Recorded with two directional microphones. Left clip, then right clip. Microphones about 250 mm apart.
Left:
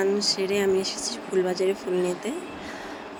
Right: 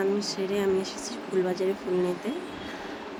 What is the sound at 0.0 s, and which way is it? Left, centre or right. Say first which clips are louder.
Speech: left 4 dB; left.